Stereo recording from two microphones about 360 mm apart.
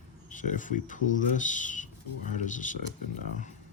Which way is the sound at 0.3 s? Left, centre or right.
Left.